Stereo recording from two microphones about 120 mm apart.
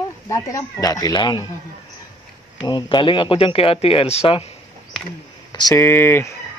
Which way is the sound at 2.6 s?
40° left (ahead or behind).